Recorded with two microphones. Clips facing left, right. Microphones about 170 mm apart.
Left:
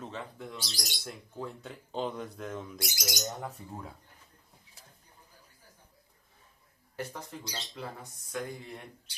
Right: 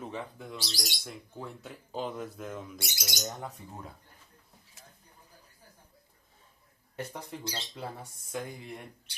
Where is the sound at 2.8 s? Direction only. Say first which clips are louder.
Left 3 dB; 25° right (ahead or behind).